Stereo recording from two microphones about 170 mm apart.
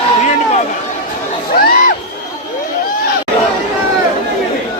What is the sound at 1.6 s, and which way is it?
Crowd, 55° left (ahead or behind).